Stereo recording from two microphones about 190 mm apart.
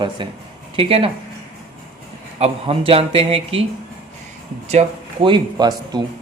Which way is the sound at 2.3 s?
30° right (ahead or behind).